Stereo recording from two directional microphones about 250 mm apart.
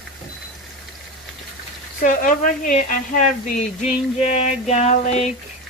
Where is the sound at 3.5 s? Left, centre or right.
Left.